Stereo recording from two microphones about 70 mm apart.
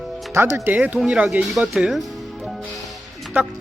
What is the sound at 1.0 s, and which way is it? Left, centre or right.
Speech, centre.